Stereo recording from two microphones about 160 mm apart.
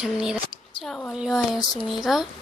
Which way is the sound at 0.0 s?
5° right (ahead or behind).